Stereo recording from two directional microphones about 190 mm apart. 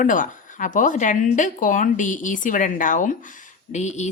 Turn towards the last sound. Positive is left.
turn(degrees=40)  # may be behind; listen again after turning